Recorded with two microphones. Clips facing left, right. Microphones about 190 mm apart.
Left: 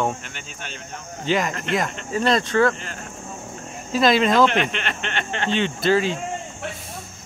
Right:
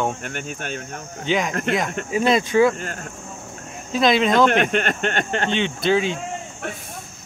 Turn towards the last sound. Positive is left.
turn(degrees=0)  # may be behind; listen again after turning